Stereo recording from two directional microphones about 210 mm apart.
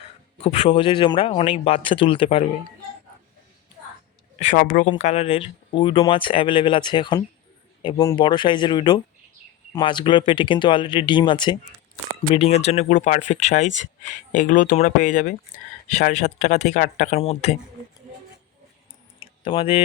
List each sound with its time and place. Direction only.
0.4 s speech: 25° left (ahead or behind)
4.4 s speech: 40° left (ahead or behind)
19.2 s a sound: 25° left (ahead or behind)